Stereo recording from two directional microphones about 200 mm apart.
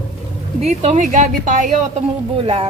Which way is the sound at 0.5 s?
35° right (ahead or behind).